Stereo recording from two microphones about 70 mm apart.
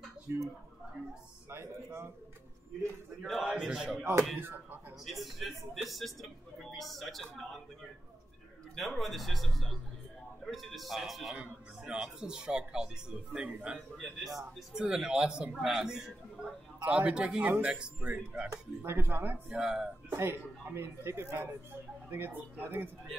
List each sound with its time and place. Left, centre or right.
0.3 s speech: right
1.5 s speech: right
3.3 s speech: centre
3.5 s speech: centre
4.0 s speech: right
5.0 s speech: centre
8.7 s speech: centre
11.3 s speech: centre
13.7 s speech: centre
14.7 s speech: centre
18.8 s speech: right
19.5 s speech: centre
20.2 s speech: right